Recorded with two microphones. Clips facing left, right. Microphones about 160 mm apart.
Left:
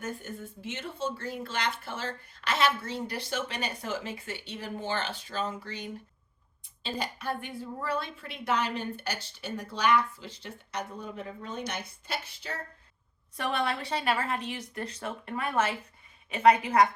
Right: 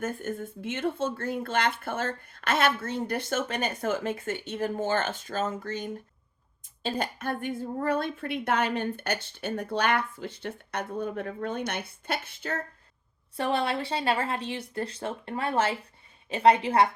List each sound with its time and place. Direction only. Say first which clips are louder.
0.0 s a woman's voice: right 6 dB; 50° right (ahead or behind)
13.3 s speech: right 3 dB; 30° right (ahead or behind)